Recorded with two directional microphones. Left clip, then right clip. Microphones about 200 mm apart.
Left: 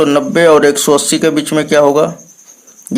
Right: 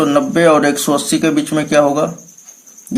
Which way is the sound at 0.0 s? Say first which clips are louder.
Left 3 dB; 35° left (ahead or behind).